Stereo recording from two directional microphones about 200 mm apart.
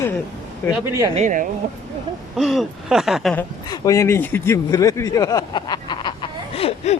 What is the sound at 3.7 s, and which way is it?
Speech, 15° left (ahead or behind).